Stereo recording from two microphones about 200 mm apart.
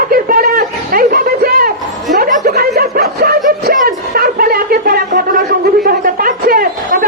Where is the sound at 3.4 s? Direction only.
45° right (ahead or behind).